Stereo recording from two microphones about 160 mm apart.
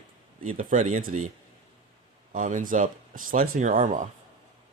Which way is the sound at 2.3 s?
55° right (ahead or behind).